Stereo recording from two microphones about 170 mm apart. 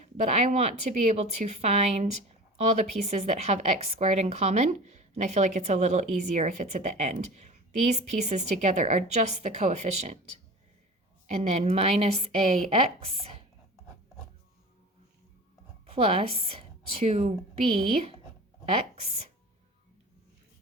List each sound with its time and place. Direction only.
0.0 s a woman's voice: 40° right (ahead or behind)
11.3 s speech: 40° right (ahead or behind)
15.9 s speech: 35° right (ahead or behind)